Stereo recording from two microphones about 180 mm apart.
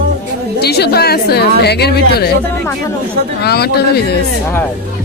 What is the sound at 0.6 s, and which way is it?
A woman's voice, 65° left (ahead or behind).